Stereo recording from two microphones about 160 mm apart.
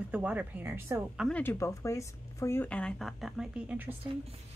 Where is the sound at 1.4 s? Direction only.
15° left (ahead or behind); by 4.0 s 10° right (ahead or behind).